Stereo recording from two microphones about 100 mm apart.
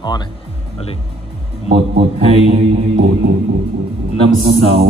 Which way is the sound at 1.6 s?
80° right.